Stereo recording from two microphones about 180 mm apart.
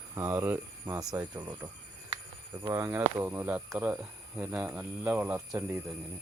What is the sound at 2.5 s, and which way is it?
Speech, 25° right (ahead or behind).